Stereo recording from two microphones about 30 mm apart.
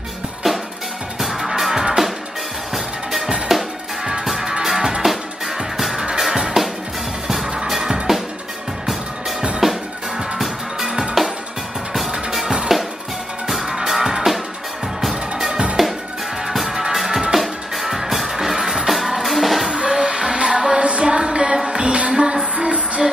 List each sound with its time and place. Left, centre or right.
1.2 s music: centre
8.1 s music: centre
9.6 s music: centre
11.2 s music: centre
12.7 s music: centre
15.3 s music: centre
19.7 s music: right
22.1 s music: right